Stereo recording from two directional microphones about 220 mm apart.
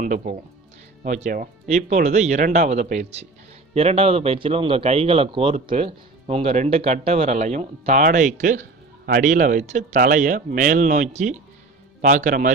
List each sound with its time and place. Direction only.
0.0 s speech: 35° right (ahead or behind)